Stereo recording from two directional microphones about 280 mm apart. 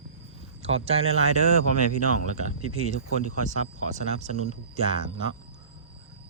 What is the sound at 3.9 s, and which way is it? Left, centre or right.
Speech, right.